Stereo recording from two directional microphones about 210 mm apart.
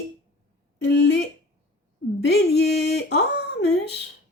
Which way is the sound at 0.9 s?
55° left (ahead or behind).